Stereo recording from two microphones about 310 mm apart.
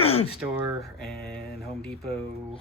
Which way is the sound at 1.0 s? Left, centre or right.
Centre.